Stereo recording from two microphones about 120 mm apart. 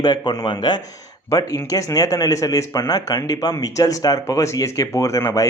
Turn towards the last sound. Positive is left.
turn(degrees=25)  # may be behind; listen again after turning